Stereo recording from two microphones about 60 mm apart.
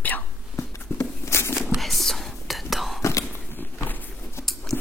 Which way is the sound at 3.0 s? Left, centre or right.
Left.